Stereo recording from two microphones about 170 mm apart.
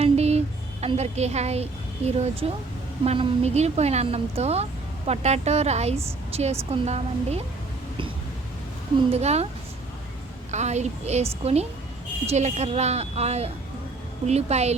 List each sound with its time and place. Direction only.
0.0 s a sound: 40° right (ahead or behind)
2.0 s a woman's voice: 35° right (ahead or behind)
9.0 s a woman's voice: 40° right (ahead or behind)
10.5 s a woman's voice: 40° right (ahead or behind)